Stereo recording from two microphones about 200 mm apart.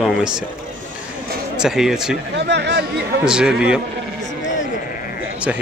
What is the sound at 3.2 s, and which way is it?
Speech, 5° right (ahead or behind).